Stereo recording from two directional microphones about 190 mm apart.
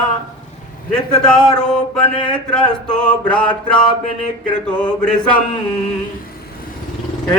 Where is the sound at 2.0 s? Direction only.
25° left (ahead or behind).